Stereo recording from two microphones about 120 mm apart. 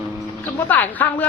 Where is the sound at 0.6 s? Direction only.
15° left (ahead or behind).